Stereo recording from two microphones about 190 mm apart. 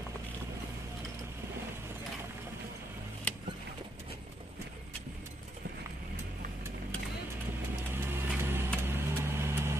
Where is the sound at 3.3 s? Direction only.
5° left (ahead or behind).